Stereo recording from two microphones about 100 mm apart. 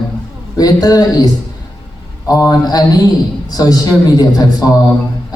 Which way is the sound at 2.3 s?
40° left (ahead or behind).